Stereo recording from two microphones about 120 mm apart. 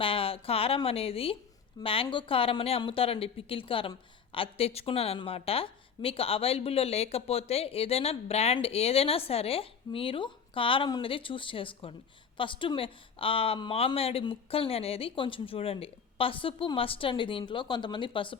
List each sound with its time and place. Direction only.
0.0 s a woman's voice: 50° left (ahead or behind)